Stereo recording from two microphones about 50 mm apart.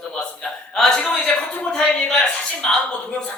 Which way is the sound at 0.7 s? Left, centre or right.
Centre.